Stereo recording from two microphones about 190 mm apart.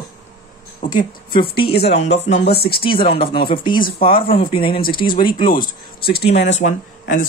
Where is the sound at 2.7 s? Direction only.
30° left (ahead or behind).